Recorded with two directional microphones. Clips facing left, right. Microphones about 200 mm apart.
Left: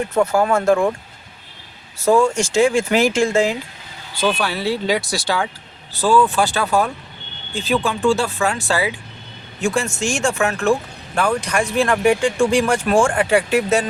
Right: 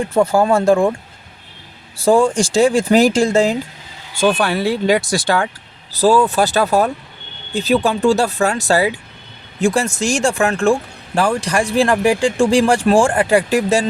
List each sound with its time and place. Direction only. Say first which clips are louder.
0.1 s speech: right 3 dB; 30° right (ahead or behind)
2.0 s speech: right 2 dB; 30° right (ahead or behind)
4.1 s speech: right 4 dB; 50° right (ahead or behind)
5.9 s speech: right 3 dB; 40° right (ahead or behind)